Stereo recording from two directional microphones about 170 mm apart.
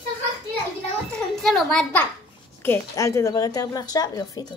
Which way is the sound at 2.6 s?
15° left (ahead or behind).